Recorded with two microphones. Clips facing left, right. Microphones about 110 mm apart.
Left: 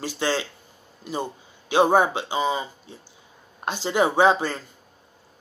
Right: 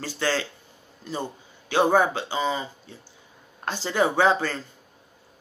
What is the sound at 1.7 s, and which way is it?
Speech, 15° left (ahead or behind).